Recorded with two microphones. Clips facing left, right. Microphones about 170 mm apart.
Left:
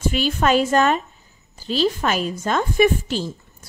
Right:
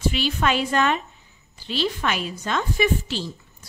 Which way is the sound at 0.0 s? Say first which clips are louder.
Left 3 dB; 45° left (ahead or behind).